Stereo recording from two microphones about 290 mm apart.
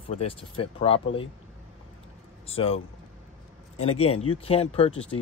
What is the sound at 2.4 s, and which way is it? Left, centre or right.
Speech, centre.